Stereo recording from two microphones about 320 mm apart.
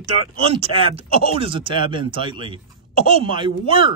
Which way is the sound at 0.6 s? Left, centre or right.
Centre.